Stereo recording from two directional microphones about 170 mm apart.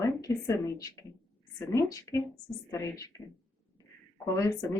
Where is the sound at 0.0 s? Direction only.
20° left (ahead or behind).